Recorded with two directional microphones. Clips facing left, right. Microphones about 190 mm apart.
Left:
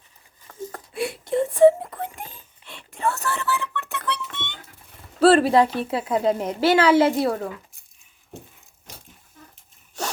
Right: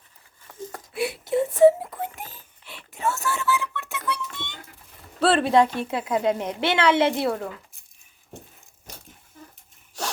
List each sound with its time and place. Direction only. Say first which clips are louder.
0.7 s wail: right 1 dB; 5° right (ahead or behind)
5.2 s a woman's voice: left 3 dB; centre (ahead or behind)